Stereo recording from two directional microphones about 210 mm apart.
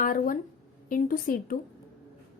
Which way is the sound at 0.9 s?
40° left (ahead or behind).